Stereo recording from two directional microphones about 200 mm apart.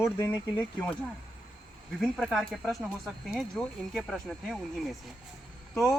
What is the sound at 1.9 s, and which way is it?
Speech, centre (ahead or behind).